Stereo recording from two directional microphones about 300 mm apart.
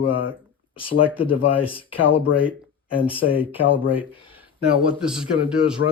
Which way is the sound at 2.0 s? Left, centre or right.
Left.